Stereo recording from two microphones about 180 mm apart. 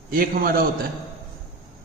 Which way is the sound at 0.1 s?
55° right (ahead or behind).